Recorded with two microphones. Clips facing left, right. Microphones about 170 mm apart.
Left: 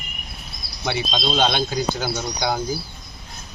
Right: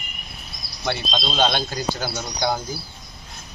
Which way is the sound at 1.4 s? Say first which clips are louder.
Even; 15° left (ahead or behind).